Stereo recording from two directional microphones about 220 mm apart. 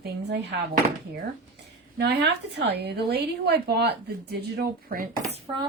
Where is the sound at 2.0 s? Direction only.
50° right (ahead or behind).